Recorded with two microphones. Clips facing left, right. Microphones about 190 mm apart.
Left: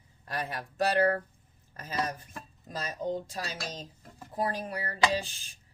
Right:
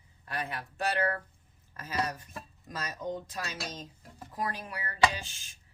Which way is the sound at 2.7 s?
30° left (ahead or behind).